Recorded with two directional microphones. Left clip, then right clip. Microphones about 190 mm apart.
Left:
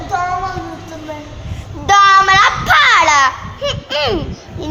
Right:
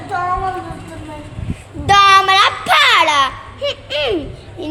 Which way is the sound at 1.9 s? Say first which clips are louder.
Left 1 dB; 15° right (ahead or behind).